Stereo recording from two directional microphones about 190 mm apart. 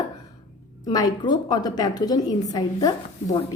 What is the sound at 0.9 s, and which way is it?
A woman's voice, 20° left (ahead or behind).